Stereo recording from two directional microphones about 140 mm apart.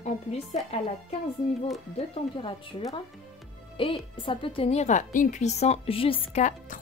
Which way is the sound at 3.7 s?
40° left (ahead or behind).